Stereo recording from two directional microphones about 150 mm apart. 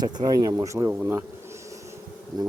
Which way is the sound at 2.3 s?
25° right (ahead or behind).